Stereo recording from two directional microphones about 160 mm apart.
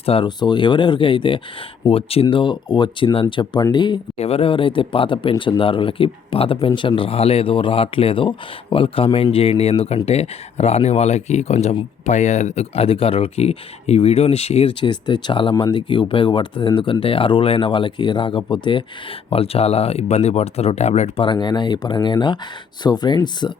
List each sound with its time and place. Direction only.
0.0 s speech: 35° left (ahead or behind)
21.2 s speech: 30° left (ahead or behind)